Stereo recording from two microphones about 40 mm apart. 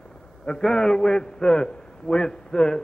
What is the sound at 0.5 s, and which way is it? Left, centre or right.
A man's voice, centre.